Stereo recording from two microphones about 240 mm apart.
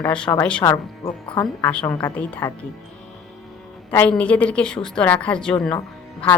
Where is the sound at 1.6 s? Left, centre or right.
Centre.